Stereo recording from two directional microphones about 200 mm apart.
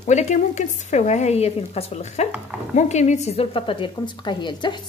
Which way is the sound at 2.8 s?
35° left (ahead or behind).